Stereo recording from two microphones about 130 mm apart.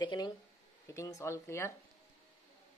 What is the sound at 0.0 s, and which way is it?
Speech, 30° left (ahead or behind).